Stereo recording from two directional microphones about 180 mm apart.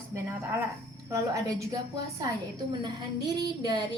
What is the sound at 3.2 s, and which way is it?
Speech, 20° right (ahead or behind).